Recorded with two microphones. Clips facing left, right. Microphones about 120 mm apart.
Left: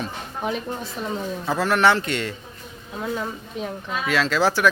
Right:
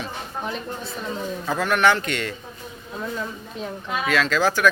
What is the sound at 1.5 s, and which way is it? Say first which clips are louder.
Speech: left 1 dB; 30° left (ahead or behind).